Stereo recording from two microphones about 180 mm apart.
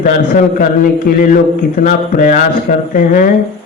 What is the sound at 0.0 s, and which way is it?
A man's voice, 45° left (ahead or behind).